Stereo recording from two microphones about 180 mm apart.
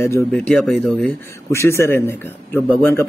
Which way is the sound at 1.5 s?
15° left (ahead or behind).